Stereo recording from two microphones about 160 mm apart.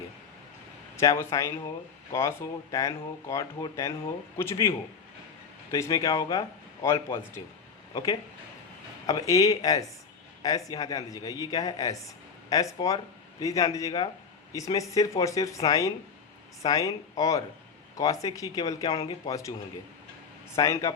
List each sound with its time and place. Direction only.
0.9 s a man's voice: 20° left (ahead or behind)
5.7 s a man's voice: 20° left (ahead or behind)
20.6 s speech: 20° left (ahead or behind)